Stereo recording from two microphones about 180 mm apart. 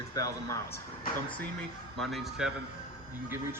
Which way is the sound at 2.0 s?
Centre (ahead or behind).